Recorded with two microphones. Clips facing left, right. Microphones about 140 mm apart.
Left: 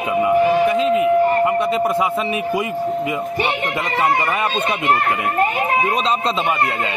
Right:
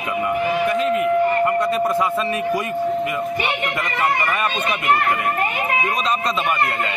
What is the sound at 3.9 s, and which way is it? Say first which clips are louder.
A man's voice: left 3 dB; 30° left (ahead or behind).